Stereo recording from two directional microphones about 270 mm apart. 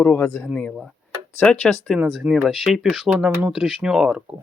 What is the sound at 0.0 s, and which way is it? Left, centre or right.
Speech, centre.